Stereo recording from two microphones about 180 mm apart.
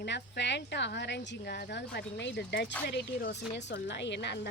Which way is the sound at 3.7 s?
75° left (ahead or behind).